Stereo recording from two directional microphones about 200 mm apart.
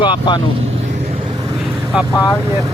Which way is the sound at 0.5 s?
30° right (ahead or behind).